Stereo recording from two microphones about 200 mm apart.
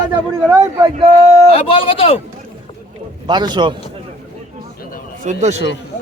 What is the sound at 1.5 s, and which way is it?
Speech, 30° left (ahead or behind).